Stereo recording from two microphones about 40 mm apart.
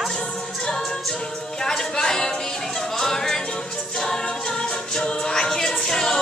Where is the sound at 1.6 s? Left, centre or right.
Centre.